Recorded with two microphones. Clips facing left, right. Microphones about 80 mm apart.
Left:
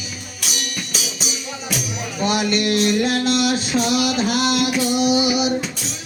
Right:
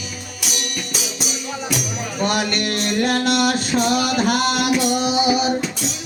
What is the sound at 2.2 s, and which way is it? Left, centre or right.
Music, right.